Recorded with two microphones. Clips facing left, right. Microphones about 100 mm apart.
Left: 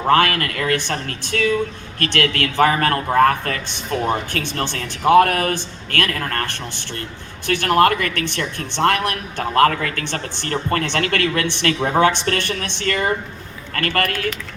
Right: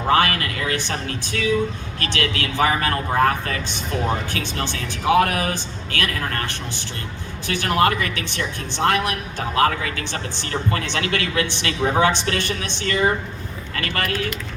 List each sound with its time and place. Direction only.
0.1 s speech: 55° left (ahead or behind)